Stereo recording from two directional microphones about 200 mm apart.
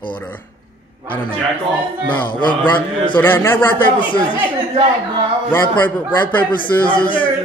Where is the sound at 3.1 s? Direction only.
10° left (ahead or behind).